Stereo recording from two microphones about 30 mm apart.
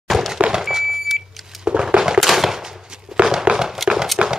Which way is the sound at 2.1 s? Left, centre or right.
Centre.